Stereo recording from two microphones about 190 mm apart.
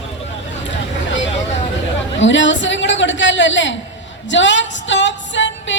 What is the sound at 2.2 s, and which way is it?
Music, 75° left (ahead or behind).